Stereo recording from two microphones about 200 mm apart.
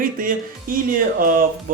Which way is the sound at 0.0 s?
45° right (ahead or behind).